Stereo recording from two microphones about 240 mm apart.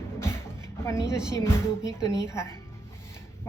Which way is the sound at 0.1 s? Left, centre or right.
Centre.